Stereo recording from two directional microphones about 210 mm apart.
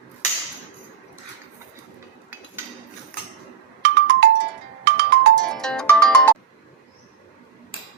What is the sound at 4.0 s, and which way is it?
Music, 50° right (ahead or behind).